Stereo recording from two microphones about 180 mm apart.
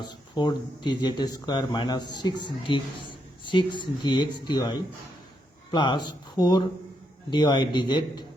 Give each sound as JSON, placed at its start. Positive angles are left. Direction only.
{"t": 0.1, "sound": "speech", "side_deg": 25}